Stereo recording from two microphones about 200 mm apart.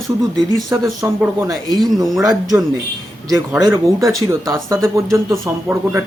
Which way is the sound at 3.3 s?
20° right (ahead or behind).